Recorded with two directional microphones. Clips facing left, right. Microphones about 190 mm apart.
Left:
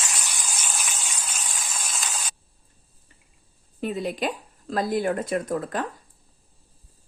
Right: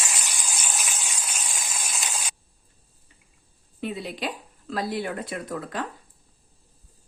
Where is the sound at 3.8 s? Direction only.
45° left (ahead or behind).